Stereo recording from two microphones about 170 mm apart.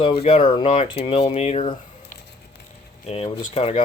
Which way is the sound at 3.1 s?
35° left (ahead or behind).